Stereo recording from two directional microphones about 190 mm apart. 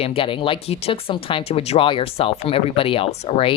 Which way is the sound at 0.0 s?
30° left (ahead or behind).